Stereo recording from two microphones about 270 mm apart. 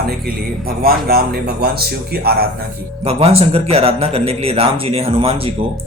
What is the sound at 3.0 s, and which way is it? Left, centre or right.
Speech, right.